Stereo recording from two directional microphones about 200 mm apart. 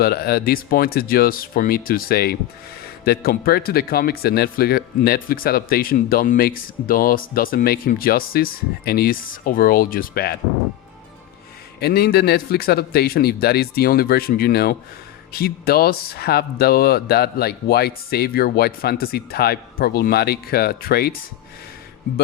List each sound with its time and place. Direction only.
0.0 s speech: 50° left (ahead or behind)
11.8 s speech: 50° left (ahead or behind)